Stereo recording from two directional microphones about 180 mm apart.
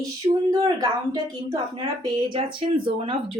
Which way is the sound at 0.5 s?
20° right (ahead or behind).